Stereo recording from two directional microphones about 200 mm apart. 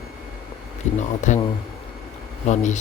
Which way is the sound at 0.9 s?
35° left (ahead or behind).